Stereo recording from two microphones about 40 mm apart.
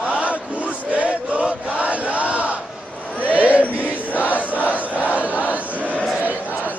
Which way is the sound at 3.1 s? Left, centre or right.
Right.